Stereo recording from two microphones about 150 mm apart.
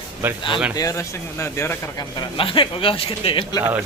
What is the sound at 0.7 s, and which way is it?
Speech, 20° left (ahead or behind).